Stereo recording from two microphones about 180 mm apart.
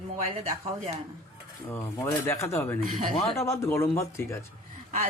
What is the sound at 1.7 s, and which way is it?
Speech, 15° left (ahead or behind).